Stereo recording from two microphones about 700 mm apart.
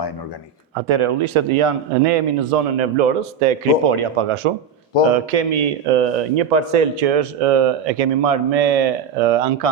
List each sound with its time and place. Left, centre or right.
0.8 s a man's voice: right
2.7 s speech: right
3.8 s a man's voice: right
5.0 s a man's voice: right